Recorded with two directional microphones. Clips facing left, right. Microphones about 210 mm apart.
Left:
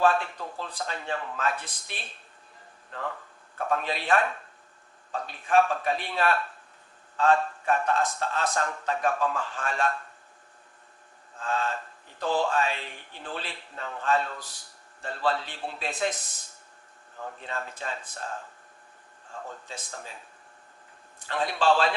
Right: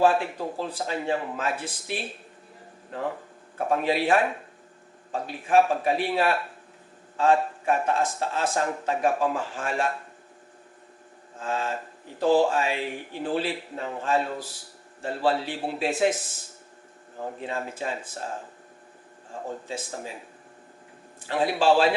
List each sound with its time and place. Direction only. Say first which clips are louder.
0.0 s a man's voice: right 3 dB; 10° right (ahead or behind)
11.3 s a man's voice: right 1 dB; 10° right (ahead or behind)
17.4 s a man's voice: right 5 dB; 10° right (ahead or behind)
19.6 s a man's voice: right 7 dB; 5° right (ahead or behind)
21.2 s a man's voice: right 3 dB; 10° right (ahead or behind)